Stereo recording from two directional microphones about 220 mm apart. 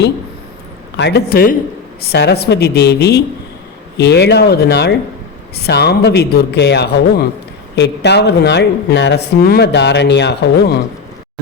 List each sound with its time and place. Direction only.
0.9 s speech: 50° left (ahead or behind)